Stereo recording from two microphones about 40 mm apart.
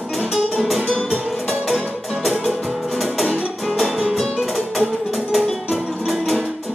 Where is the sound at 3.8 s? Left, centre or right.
Centre.